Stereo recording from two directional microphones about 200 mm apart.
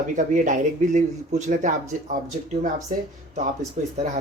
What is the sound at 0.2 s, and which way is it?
Speech, 40° right (ahead or behind).